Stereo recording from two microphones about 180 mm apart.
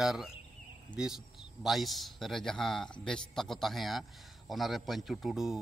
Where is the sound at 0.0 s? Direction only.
Centre (ahead or behind).